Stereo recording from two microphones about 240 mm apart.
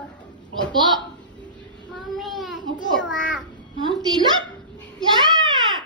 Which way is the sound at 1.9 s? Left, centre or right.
Centre.